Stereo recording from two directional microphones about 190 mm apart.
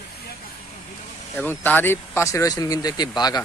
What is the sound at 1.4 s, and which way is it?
Speech, 10° left (ahead or behind).